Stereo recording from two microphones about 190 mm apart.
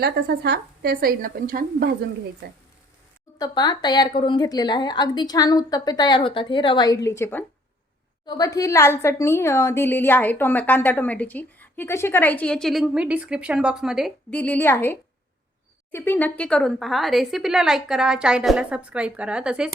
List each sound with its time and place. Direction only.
0.0 s a woman's voice: 60° right (ahead or behind)
3.3 s a woman's voice: 20° left (ahead or behind); by 19.7 s 5° right (ahead or behind)